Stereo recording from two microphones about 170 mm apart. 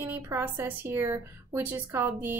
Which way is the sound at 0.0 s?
10° right (ahead or behind).